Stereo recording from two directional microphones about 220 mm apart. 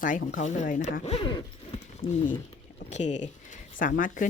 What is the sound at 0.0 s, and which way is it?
Speech, 40° left (ahead or behind).